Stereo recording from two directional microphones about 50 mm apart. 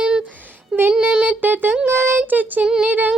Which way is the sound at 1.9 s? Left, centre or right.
Right.